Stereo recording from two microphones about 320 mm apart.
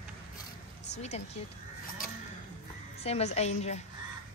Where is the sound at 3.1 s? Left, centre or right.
Centre.